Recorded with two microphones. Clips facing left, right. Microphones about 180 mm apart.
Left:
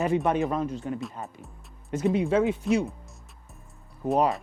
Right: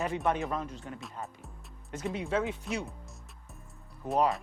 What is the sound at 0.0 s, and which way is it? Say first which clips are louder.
Speech: left 6 dB; 15° left (ahead or behind).